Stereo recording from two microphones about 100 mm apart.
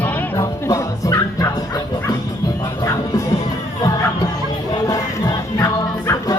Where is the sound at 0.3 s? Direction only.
35° left (ahead or behind).